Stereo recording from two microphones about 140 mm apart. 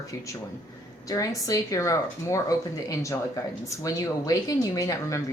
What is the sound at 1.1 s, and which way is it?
Speech, 25° left (ahead or behind).